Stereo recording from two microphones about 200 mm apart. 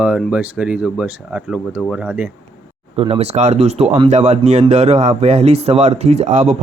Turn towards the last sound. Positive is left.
turn(degrees=-35)  # may be behind; listen again after turning